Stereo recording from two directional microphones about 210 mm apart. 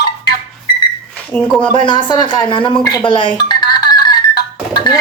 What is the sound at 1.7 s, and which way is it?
A woman's voice, 20° left (ahead or behind).